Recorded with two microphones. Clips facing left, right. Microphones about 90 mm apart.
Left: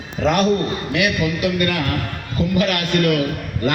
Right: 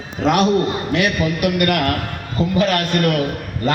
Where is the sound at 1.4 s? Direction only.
60° right (ahead or behind).